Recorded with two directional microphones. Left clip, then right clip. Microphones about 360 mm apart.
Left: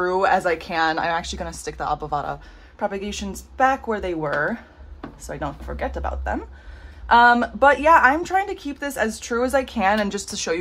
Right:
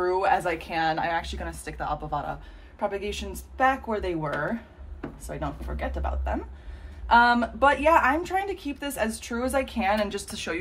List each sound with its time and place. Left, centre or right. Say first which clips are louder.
0.0 s a woman's voice: left 4 dB; left